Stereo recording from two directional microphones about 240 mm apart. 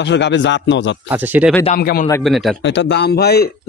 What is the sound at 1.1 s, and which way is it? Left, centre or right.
Speech, centre.